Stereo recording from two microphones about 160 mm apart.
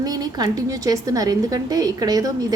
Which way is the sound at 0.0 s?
25° right (ahead or behind).